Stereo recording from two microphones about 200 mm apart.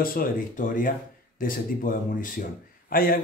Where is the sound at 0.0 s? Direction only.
45° left (ahead or behind).